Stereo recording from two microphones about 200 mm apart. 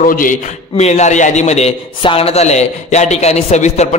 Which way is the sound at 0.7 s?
35° left (ahead or behind).